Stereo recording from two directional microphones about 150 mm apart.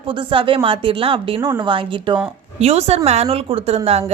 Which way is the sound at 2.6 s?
45° right (ahead or behind).